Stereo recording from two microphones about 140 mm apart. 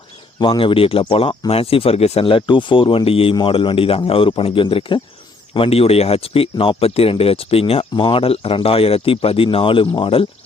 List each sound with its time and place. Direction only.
0.3 s speech: 35° left (ahead or behind)